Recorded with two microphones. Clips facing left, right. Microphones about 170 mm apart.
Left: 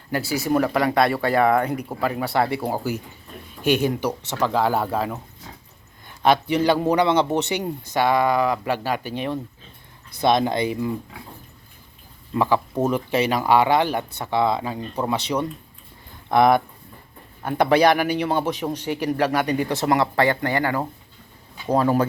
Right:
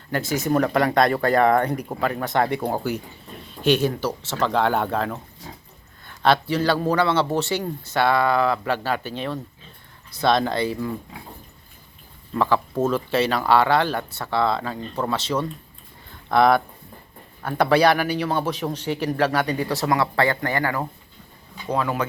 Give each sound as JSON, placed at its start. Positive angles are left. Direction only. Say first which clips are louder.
{"t": 0.3, "sound": "a man's voice", "louder": "even", "side_deg": 10}
{"t": 12.3, "sound": "a man's voice", "louder": "left 1 dB", "side_deg": 15}
{"t": 21.7, "sound": "speech", "louder": "left 5 dB", "side_deg": 35}